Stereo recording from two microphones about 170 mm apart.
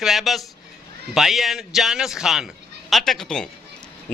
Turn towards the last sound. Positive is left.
turn(degrees=5)  # may be behind; listen again after turning